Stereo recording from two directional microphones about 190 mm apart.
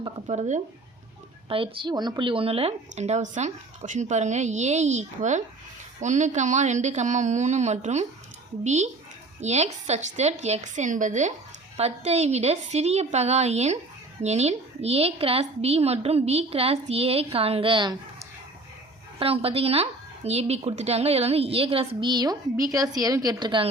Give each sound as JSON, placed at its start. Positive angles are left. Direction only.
{"t": 0.3, "sound": "a woman's voice", "side_deg": -40}